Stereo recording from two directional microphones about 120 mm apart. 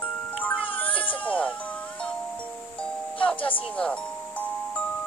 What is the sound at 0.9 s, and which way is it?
Baby cry, 45° left (ahead or behind).